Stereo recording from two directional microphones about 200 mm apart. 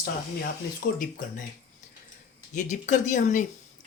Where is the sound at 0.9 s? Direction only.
45° left (ahead or behind).